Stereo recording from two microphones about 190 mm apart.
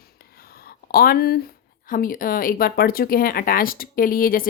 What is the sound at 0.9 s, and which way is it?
A woman's voice, 50° left (ahead or behind).